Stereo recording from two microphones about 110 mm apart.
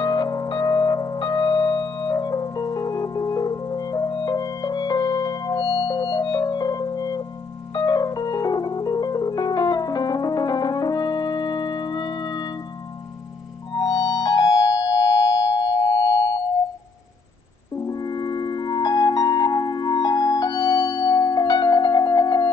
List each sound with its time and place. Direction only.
0.0 s music: 40° left (ahead or behind)
13.7 s music: 35° left (ahead or behind)
17.8 s music: 35° left (ahead or behind)